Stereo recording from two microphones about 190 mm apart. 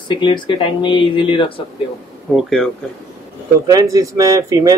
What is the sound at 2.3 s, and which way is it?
Speech, centre (ahead or behind).